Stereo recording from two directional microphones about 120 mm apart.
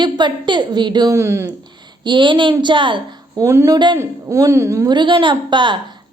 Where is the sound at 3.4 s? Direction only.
20° right (ahead or behind).